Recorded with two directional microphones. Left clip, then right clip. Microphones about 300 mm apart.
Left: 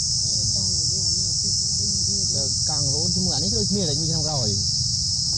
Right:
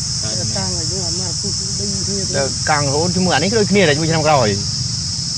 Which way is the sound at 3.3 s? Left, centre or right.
Centre.